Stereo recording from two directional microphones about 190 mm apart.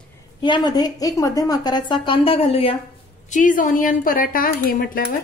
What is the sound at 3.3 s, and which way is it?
Speech, 45° left (ahead or behind).